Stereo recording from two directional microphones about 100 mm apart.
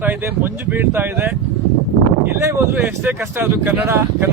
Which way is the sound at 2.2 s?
25° right (ahead or behind).